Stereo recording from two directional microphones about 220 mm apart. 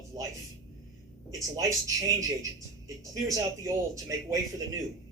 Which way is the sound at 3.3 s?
15° right (ahead or behind).